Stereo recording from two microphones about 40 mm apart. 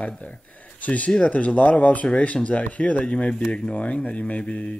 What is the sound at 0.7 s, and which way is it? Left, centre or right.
Speech, left.